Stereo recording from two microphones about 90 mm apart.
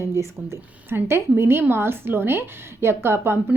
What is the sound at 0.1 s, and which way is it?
A woman's voice, 30° right (ahead or behind).